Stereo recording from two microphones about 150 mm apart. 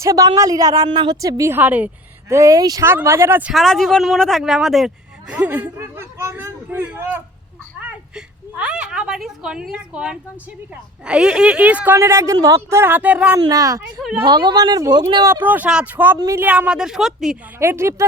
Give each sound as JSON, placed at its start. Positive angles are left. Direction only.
{"t": 0.0, "sound": "speech", "side_deg": -20}
{"t": 2.3, "sound": "a woman's voice", "side_deg": -20}
{"t": 3.5, "sound": "speech", "side_deg": 0}
{"t": 5.3, "sound": "a sound", "side_deg": -10}
{"t": 11.0, "sound": "a woman's voice", "side_deg": -5}
{"t": 13.4, "sound": "speech", "side_deg": -25}
{"t": 13.8, "sound": "speech", "side_deg": -5}
{"t": 14.3, "sound": "speech", "side_deg": -30}
{"t": 17.6, "sound": "a woman's voice", "side_deg": -15}